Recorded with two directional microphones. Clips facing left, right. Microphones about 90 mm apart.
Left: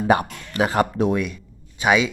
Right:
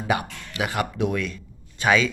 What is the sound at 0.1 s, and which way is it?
Speech, 40° left (ahead or behind).